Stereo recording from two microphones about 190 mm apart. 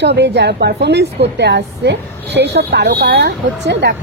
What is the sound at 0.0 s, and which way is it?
A woman's voice, 65° right (ahead or behind).